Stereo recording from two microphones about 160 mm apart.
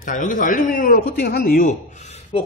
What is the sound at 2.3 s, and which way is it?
Speech, 35° left (ahead or behind).